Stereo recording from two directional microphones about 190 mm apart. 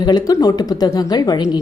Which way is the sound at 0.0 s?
20° left (ahead or behind).